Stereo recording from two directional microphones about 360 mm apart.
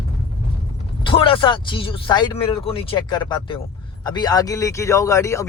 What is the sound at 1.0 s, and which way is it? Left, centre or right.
A man's voice, centre.